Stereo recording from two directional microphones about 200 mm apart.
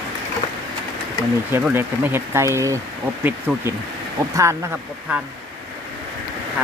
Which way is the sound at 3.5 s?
Centre (ahead or behind).